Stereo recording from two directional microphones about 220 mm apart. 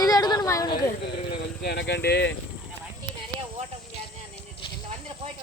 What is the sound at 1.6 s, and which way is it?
Speech, 50° left (ahead or behind).